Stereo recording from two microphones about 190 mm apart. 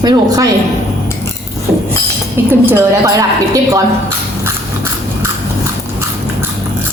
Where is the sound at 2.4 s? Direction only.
10° right (ahead or behind).